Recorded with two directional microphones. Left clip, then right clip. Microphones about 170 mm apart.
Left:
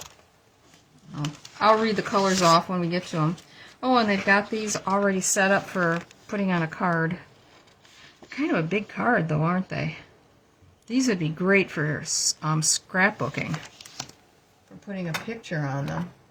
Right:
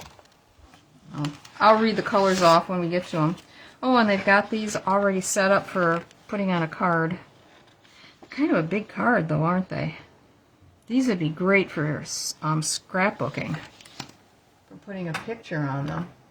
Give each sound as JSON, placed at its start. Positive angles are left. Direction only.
{"t": 1.5, "sound": "speech", "side_deg": -15}
{"t": 8.3, "sound": "speech", "side_deg": -15}
{"t": 11.0, "sound": "speech", "side_deg": -5}
{"t": 14.8, "sound": "speech", "side_deg": -5}